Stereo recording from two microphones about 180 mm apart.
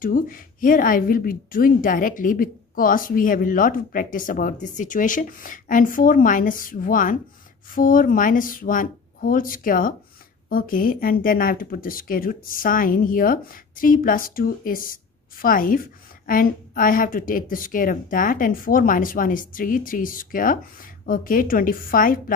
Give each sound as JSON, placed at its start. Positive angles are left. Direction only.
{"t": 0.0, "sound": "speech", "side_deg": 50}